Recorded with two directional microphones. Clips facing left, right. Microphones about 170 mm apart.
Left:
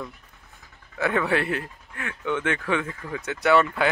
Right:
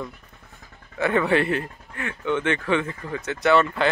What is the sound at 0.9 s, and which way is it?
Speech, 5° left (ahead or behind).